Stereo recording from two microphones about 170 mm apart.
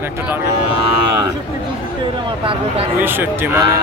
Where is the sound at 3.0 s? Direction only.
10° right (ahead or behind).